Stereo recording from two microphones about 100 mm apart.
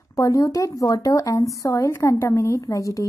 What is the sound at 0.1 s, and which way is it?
Speech, 35° left (ahead or behind).